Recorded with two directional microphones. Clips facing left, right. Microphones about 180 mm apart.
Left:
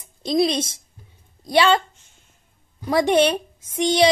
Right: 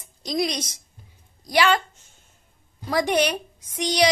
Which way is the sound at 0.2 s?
25° left (ahead or behind).